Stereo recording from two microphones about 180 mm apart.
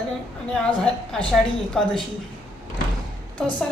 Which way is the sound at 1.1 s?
Centre (ahead or behind).